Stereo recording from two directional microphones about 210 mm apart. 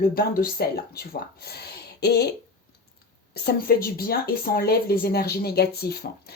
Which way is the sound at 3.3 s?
50° left (ahead or behind).